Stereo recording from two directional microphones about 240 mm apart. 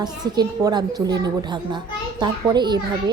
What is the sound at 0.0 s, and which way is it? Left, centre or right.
A woman's voice, centre.